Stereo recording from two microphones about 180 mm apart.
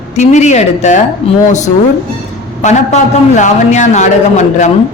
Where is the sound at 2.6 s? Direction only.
40° left (ahead or behind).